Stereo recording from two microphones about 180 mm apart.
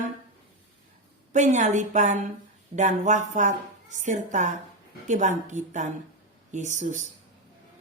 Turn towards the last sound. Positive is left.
turn(degrees=-40)  # may be behind; listen again after turning